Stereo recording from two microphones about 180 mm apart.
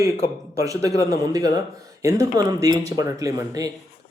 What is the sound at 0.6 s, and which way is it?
Speech, 20° right (ahead or behind).